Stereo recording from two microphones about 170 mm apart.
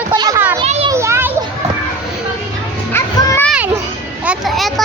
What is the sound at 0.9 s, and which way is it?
Children playing, 15° right (ahead or behind).